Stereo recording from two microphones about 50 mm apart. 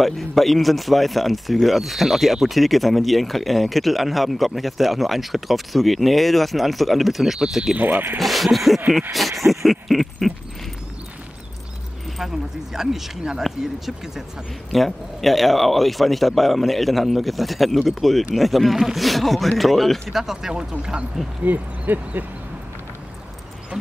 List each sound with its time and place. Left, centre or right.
0.0 s speech: centre
7.7 s speech: right
8.2 s speech: centre
12.7 s speech: centre
21.5 s speech: right